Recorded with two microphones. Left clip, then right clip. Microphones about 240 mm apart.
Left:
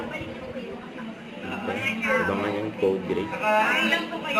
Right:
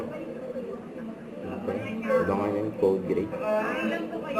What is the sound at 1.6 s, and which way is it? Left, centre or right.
Music, centre.